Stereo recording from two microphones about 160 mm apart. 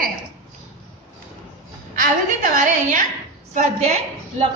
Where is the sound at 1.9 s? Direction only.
55° right (ahead or behind).